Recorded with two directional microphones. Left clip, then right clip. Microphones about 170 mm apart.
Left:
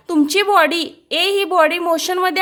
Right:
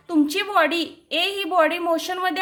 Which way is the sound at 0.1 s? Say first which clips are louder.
Left 6 dB; 40° left (ahead or behind).